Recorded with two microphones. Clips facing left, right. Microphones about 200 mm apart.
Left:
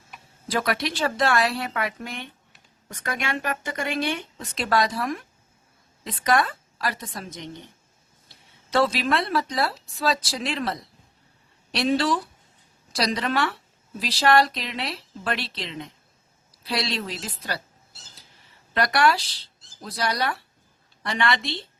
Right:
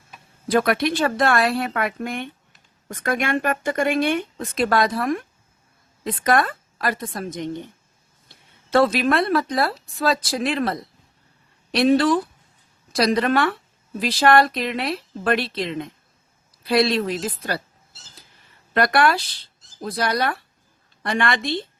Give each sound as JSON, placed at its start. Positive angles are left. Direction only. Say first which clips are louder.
{"t": 0.4, "sound": "a woman's voice", "louder": "right 6 dB", "side_deg": -55}
{"t": 8.7, "sound": "speech", "louder": "right 5 dB", "side_deg": -55}
{"t": 18.7, "sound": "speech", "louder": "right 3 dB", "side_deg": -55}